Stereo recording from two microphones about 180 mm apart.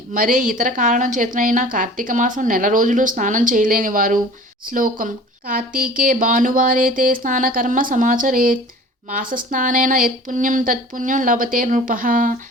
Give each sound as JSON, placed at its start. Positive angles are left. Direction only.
{"t": 0.1, "sound": "a woman's voice", "side_deg": -50}